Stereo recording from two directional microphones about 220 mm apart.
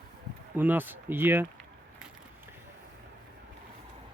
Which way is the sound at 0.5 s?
10° right (ahead or behind).